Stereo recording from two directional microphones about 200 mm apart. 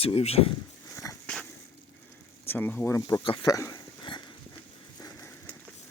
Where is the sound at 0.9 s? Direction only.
15° left (ahead or behind).